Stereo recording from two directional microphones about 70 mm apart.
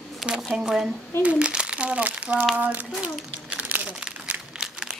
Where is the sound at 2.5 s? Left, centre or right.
Right.